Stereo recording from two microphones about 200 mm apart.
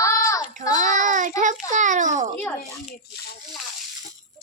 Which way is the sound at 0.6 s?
40° right (ahead or behind).